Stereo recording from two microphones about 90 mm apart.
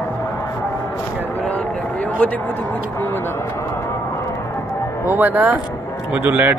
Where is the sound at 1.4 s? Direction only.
15° left (ahead or behind).